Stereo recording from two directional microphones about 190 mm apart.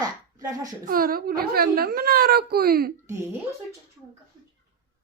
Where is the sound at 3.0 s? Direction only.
15° right (ahead or behind).